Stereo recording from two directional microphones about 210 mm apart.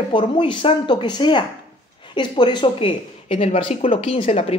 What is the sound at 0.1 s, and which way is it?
Speech, 25° left (ahead or behind).